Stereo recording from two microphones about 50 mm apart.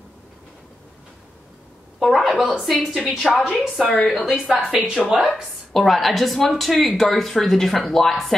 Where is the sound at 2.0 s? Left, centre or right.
Centre.